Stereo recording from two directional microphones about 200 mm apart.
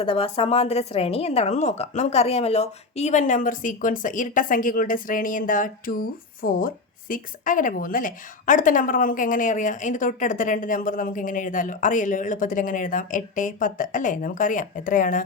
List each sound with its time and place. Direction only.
0.0 s a woman's voice: 25° left (ahead or behind)